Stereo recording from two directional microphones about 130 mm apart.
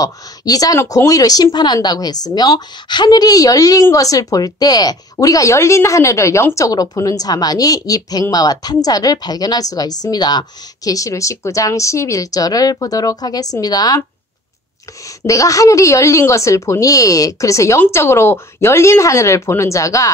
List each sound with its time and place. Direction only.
0.0 s a woman's voice: 25° left (ahead or behind)
15.0 s a woman's voice: 25° left (ahead or behind)